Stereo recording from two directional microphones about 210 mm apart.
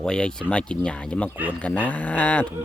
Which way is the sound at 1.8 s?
5° left (ahead or behind).